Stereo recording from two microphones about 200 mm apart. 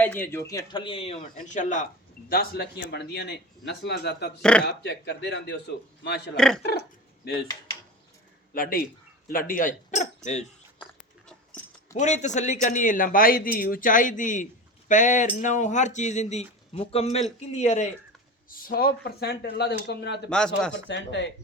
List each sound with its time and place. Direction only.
0.0 s speech: 10° left (ahead or behind); by 1.8 s 40° left (ahead or behind)
2.3 s a man's voice: 50° left (ahead or behind)
6.3 s speech: 5° left (ahead or behind)
6.6 s speech: 55° left (ahead or behind)
8.5 s a man's voice: 45° left (ahead or behind)
11.9 s a man's voice: 35° left (ahead or behind); by 21.2 s 60° left (ahead or behind)